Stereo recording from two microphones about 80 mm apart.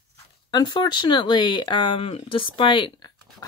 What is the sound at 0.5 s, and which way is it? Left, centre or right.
Speech, left.